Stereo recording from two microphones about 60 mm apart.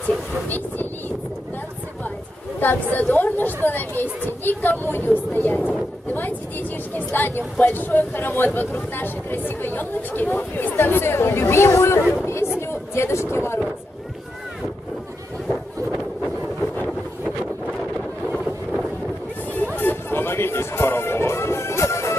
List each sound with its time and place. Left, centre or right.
0.5 s a sound: left
2.6 s speech: left
7.2 s speech: left
15.4 s wind noise: centre
18.4 s wind noise: centre
19.5 s music: left